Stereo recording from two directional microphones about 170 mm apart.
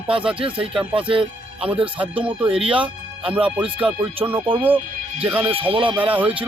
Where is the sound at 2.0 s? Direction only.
10° right (ahead or behind).